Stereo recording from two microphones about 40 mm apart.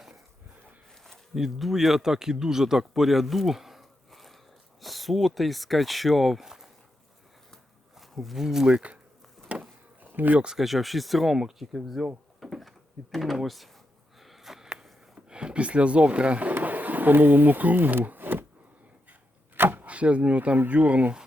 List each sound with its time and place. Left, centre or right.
1.4 s speech: centre
6.4 s a sound: centre
7.9 s a sound: centre
8.4 s speech: centre
9.5 s a sound: right
10.0 s bee: right
10.6 s speech: centre
11.3 s speech: centre
14.2 s sniff: centre
15.1 s speech: right
16.6 s bee: right
19.5 s arrow: right
19.8 s speech: right